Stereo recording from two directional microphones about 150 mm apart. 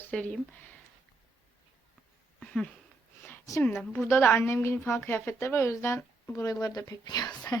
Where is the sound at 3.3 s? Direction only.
20° left (ahead or behind).